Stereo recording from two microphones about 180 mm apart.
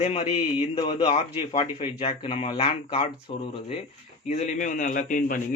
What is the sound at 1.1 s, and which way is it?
A man's voice, 35° left (ahead or behind).